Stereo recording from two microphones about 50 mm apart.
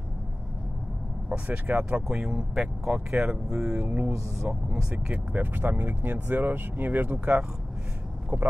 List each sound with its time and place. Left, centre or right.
1.3 s speech: right
2.1 s speech: centre
3.8 s speech: right
4.5 s speech: right
5.1 s speech: right